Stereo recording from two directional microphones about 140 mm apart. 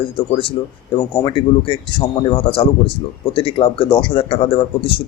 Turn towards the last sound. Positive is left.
turn(degrees=40)  # may be behind; listen again after turning